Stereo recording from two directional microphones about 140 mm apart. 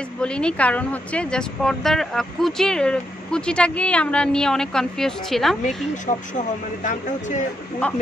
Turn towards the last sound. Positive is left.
turn(degrees=10)  # may be behind; listen again after turning